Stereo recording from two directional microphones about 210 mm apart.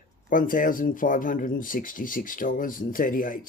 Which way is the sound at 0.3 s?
40° left (ahead or behind).